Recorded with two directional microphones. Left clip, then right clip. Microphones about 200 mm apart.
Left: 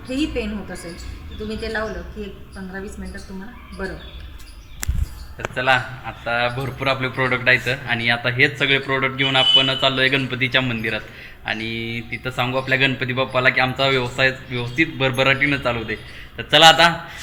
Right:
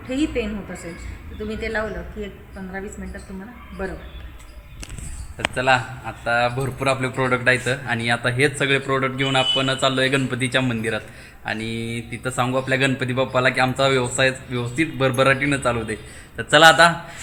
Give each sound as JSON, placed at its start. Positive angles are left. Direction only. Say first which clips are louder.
{"t": 0.1, "sound": "a woman's voice", "louder": "even", "side_deg": 0}
{"t": 3.8, "sound": "a woman's voice", "louder": "even", "side_deg": -5}
{"t": 5.5, "sound": "a man's voice", "louder": "left 1 dB", "side_deg": -20}